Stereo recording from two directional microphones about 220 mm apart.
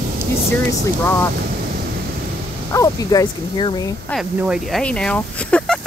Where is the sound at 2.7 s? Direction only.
15° left (ahead or behind).